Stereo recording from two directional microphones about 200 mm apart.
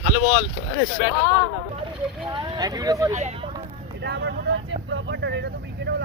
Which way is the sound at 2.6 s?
20° right (ahead or behind).